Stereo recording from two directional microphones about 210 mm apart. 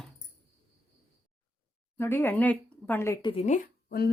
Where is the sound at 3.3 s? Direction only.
30° left (ahead or behind).